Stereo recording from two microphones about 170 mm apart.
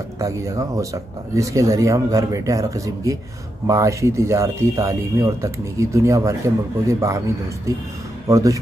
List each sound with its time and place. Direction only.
0.2 s speech: 20° right (ahead or behind)